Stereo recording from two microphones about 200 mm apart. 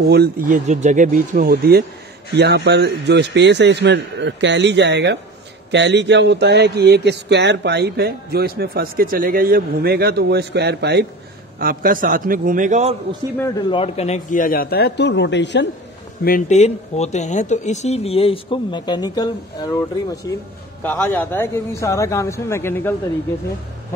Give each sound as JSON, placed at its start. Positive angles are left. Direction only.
{"t": 0.1, "sound": "a man's voice", "side_deg": -50}
{"t": 0.7, "sound": "speech", "side_deg": -35}
{"t": 11.6, "sound": "a man's voice", "side_deg": -45}
{"t": 13.4, "sound": "a man's voice", "side_deg": 20}
{"t": 16.3, "sound": "speech", "side_deg": 40}